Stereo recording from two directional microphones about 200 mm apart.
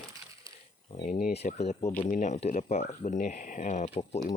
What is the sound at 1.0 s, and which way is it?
Speech, 40° left (ahead or behind).